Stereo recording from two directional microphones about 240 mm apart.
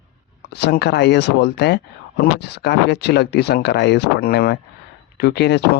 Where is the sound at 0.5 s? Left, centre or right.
Left.